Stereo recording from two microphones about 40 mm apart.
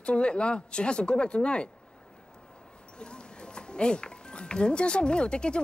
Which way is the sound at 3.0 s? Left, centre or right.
Left.